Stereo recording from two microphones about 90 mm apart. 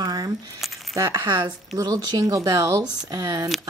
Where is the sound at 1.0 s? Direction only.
55° right (ahead or behind).